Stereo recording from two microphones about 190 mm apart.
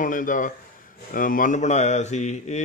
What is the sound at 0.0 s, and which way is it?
Speech, 45° left (ahead or behind).